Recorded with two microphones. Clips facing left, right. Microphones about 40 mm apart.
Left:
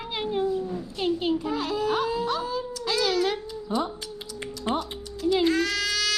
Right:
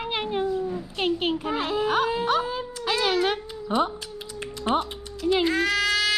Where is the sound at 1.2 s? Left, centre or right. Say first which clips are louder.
Even; right.